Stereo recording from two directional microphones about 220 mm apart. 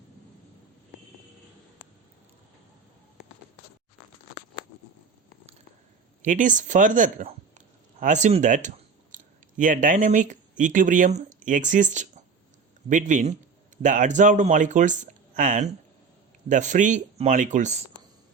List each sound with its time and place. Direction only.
6.2 s speech: 35° right (ahead or behind)